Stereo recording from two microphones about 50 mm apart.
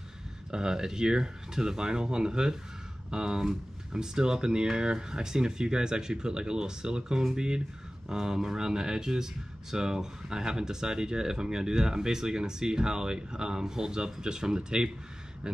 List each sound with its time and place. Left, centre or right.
0.5 s speech: centre